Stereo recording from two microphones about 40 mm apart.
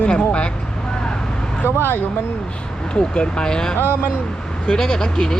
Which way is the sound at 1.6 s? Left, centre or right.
Left.